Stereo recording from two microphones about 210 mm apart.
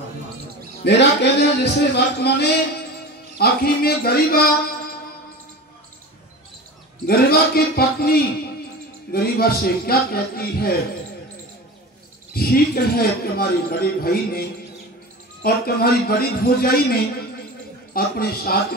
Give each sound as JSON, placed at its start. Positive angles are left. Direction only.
{"t": 0.8, "sound": "a man's voice", "side_deg": 55}
{"t": 7.1, "sound": "a man's voice", "side_deg": 45}
{"t": 12.4, "sound": "a man's voice", "side_deg": 45}